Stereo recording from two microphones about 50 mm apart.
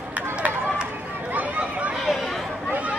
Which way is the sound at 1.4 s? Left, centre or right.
Right.